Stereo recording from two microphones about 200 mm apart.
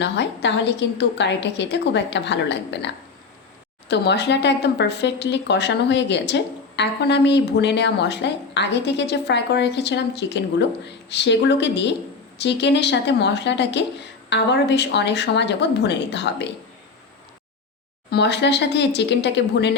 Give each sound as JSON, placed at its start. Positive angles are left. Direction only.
{"t": 0.0, "sound": "speech", "side_deg": 60}
{"t": 18.1, "sound": "speech", "side_deg": 55}